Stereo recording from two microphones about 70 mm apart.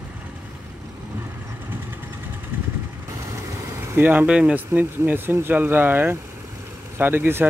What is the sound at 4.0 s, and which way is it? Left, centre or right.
Speech, right.